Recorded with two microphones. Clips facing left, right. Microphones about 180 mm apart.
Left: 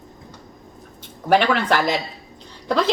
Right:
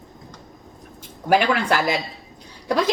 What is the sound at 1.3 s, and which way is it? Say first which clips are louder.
A woman's voice: left 1 dB; 10° right (ahead or behind).